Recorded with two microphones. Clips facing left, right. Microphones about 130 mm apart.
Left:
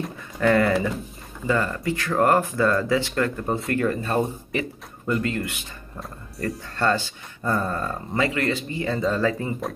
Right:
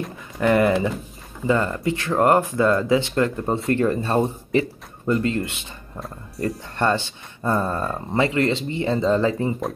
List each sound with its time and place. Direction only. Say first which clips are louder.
0.4 s speech: right 2 dB; 20° right (ahead or behind)
5.9 s speech: right 3 dB; centre (ahead or behind)
6.8 s speech: right 2 dB; 25° right (ahead or behind)